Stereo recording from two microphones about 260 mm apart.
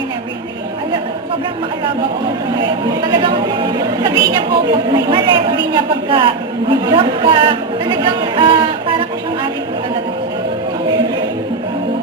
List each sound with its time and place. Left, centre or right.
3.1 s a woman's voice: centre